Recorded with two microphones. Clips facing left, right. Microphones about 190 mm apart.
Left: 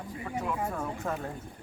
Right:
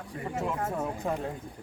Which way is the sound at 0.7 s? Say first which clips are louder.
Right 2 dB; 20° right (ahead or behind).